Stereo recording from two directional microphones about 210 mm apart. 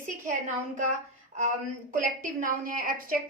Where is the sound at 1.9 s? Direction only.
40° right (ahead or behind).